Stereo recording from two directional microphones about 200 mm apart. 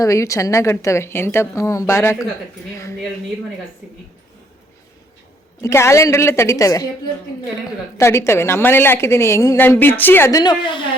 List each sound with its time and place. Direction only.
0.0 s a woman's voice: 15° left (ahead or behind)
5.6 s a woman's voice: 15° left (ahead or behind)
7.9 s a woman's voice: 15° left (ahead or behind)